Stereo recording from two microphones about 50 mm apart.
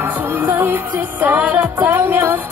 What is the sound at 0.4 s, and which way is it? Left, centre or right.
Music, right.